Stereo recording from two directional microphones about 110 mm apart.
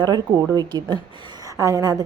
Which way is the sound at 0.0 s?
40° right (ahead or behind).